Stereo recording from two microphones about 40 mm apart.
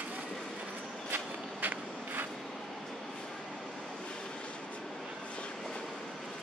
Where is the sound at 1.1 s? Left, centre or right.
Right.